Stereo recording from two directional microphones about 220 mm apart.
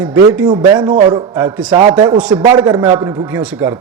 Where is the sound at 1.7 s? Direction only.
20° right (ahead or behind).